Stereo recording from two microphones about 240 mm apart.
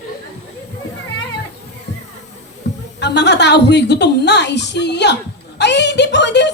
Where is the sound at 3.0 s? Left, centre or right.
Left.